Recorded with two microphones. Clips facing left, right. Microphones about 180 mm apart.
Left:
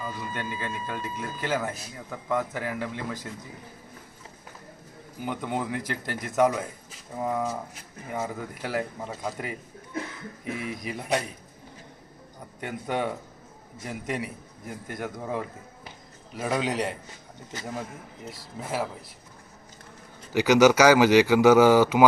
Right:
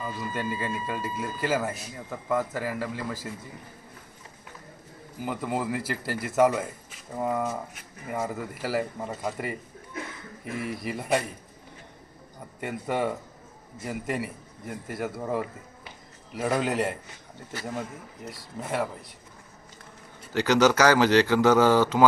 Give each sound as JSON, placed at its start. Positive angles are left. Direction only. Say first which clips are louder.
{"t": 0.0, "sound": "speech", "louder": "right 2 dB", "side_deg": -5}
{"t": 5.2, "sound": "speech", "louder": "right 1 dB", "side_deg": 0}
{"t": 10.6, "sound": "speech", "louder": "right 2 dB", "side_deg": 0}
{"t": 12.5, "sound": "speech", "louder": "right 1 dB", "side_deg": 0}
{"t": 18.3, "sound": "speech", "louder": "right 1 dB", "side_deg": 0}
{"t": 20.3, "sound": "speech", "louder": "left 3 dB", "side_deg": 10}